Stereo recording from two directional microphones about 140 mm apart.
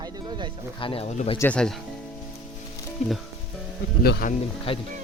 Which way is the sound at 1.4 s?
10° left (ahead or behind).